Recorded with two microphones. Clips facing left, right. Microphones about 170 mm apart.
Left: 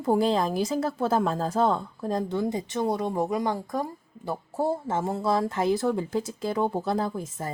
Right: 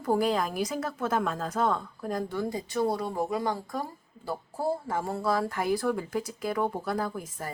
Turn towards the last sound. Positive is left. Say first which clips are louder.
# left 3 dB
turn(degrees=25)  # may be behind; listen again after turning